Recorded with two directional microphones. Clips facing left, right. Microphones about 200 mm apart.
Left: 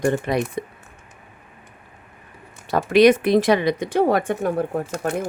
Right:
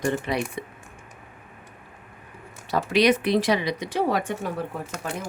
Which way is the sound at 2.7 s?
50° left (ahead or behind).